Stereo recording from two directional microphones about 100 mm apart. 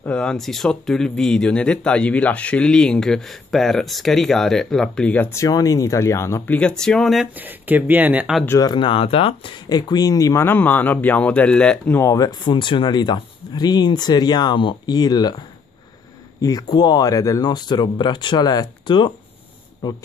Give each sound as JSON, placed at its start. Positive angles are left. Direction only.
{"t": 0.0, "sound": "speech", "side_deg": 10}
{"t": 5.3, "sound": "speech", "side_deg": 35}
{"t": 6.4, "sound": "speech", "side_deg": 15}
{"t": 6.7, "sound": "speech", "side_deg": 5}
{"t": 7.3, "sound": "speech", "side_deg": -15}
{"t": 8.7, "sound": "speech", "side_deg": 60}
{"t": 9.7, "sound": "speech", "side_deg": 40}
{"t": 10.4, "sound": "speech", "side_deg": 20}
{"t": 12.1, "sound": "speech", "side_deg": 40}